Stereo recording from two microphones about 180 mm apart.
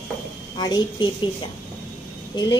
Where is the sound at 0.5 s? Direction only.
25° left (ahead or behind).